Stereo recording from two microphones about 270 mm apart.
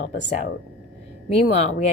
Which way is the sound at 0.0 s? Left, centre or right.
Left.